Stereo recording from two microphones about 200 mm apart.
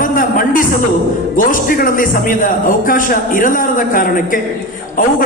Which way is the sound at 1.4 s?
45° left (ahead or behind).